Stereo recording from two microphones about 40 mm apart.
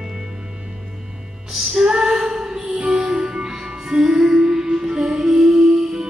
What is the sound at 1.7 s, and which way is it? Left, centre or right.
Music, centre.